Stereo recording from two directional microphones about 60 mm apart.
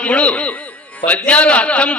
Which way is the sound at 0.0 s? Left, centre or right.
Left.